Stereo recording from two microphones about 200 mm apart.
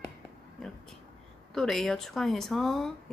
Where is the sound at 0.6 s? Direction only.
5° left (ahead or behind).